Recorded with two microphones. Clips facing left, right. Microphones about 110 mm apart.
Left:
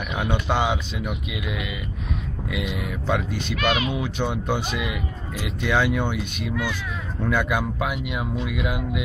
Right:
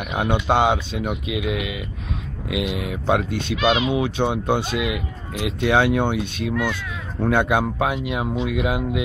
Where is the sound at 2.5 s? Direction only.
90° right.